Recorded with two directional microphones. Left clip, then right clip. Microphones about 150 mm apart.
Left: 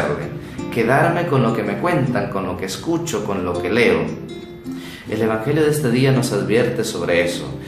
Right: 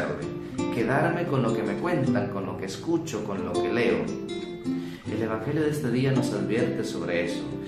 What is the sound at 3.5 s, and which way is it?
Speech, 5° left (ahead or behind).